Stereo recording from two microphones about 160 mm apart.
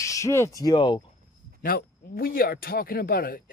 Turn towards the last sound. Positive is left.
turn(degrees=70)  # may be behind; listen again after turning